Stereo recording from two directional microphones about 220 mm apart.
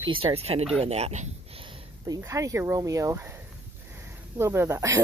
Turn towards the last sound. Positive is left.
turn(degrees=-15)  # may be behind; listen again after turning